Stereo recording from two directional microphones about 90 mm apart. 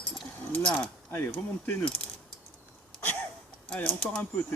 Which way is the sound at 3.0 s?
20° left (ahead or behind).